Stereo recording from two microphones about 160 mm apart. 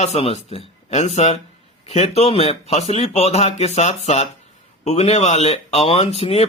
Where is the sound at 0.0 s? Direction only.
40° left (ahead or behind).